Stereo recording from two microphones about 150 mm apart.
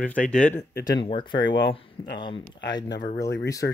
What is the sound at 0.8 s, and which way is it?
Speech, 25° left (ahead or behind).